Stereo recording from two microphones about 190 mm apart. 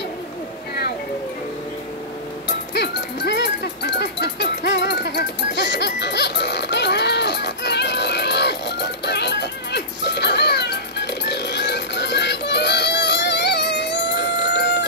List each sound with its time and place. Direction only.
2.4 s music: 65° left (ahead or behind)